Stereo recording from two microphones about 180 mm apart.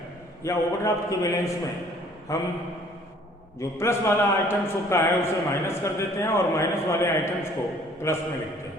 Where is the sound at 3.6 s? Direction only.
15° left (ahead or behind).